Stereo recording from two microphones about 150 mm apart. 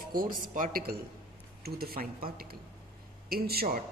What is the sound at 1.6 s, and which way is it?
Speech, 90° right.